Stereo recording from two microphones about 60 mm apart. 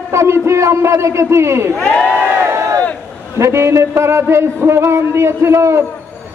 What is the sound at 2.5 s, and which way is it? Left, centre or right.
Crowd, right.